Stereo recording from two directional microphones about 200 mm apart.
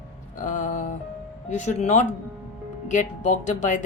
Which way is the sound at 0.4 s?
40° left (ahead or behind).